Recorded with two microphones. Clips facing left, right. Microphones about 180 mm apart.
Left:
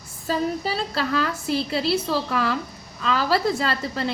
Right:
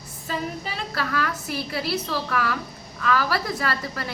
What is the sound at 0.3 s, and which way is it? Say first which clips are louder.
A woman's voice: left 6 dB; 35° left (ahead or behind).